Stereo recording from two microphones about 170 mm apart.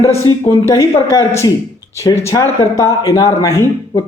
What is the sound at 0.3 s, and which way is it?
Speech, 20° left (ahead or behind).